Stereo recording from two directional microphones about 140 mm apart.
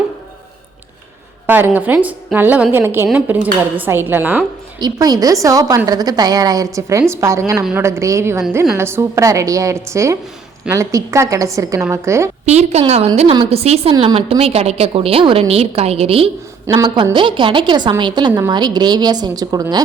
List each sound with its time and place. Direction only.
1.5 s a woman's voice: 15° right (ahead or behind)
4.8 s a woman's voice: 30° right (ahead or behind)
12.5 s a woman's voice: 50° right (ahead or behind)
16.6 s a woman's voice: 20° right (ahead or behind)
16.9 s a woman's voice: 35° right (ahead or behind)